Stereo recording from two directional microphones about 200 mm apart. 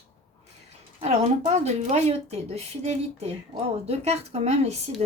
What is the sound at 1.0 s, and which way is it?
A woman's voice, 35° right (ahead or behind).